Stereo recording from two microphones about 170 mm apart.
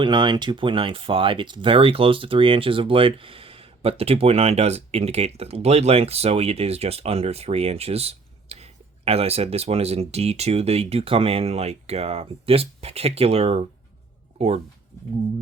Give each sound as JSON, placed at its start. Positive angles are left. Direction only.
{"t": 0.0, "sound": "speech", "side_deg": -25}